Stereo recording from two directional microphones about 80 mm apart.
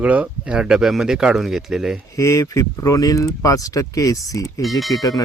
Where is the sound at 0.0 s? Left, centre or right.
Centre.